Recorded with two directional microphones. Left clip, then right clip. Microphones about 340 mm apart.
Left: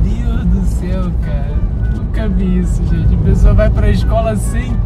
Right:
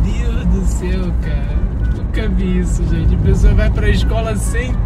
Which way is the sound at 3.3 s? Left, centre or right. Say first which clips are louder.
Left 6 dB; centre.